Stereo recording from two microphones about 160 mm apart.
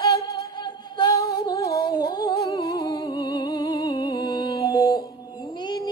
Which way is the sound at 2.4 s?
25° left (ahead or behind).